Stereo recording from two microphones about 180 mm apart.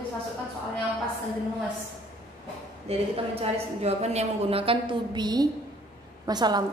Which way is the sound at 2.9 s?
35° right (ahead or behind).